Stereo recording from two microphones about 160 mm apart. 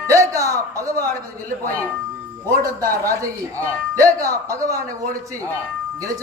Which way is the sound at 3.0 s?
20° right (ahead or behind).